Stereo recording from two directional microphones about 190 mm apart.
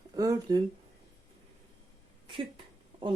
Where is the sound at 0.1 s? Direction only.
20° right (ahead or behind).